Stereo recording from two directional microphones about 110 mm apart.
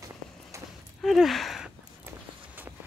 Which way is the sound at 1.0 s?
Centre (ahead or behind).